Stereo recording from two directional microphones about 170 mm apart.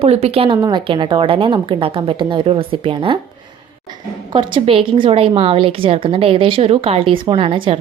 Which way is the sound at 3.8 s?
25° right (ahead or behind).